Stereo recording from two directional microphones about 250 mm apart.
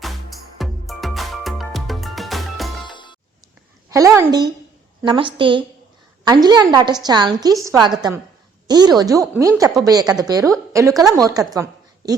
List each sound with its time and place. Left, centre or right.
0.0 s music: centre
2.8 s music: centre
3.8 s a woman's voice: centre